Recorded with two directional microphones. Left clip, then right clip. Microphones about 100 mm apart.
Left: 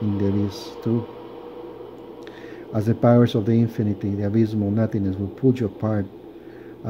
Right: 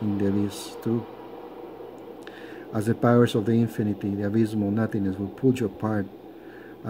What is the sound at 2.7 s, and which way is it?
Speech, 10° left (ahead or behind).